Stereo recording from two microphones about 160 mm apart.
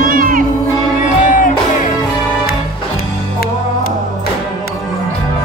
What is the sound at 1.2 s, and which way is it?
Music, 55° left (ahead or behind).